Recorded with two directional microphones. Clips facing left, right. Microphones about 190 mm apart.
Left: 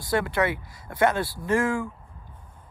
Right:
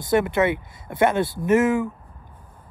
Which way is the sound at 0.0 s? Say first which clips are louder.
Right 5 dB; 25° right (ahead or behind).